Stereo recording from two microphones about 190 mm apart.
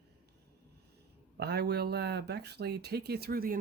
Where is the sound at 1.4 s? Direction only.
60° right (ahead or behind).